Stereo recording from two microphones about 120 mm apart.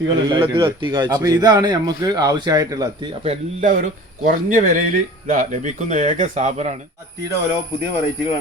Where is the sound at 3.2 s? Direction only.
75° right (ahead or behind).